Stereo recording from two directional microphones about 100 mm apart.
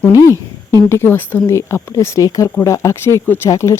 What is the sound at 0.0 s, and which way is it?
A woman's voice, 30° left (ahead or behind).